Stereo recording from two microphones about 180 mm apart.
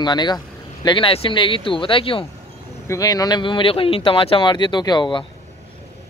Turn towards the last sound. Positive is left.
turn(degrees=25)  # may be behind; listen again after turning